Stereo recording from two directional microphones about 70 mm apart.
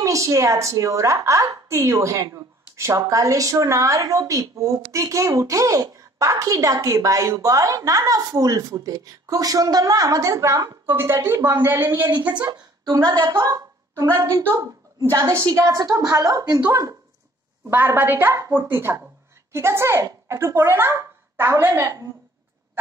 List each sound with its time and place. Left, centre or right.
0.0 s a woman's voice: right
11.0 s a woman's voice: right
12.4 s a woman's voice: right
17.6 s a woman's voice: right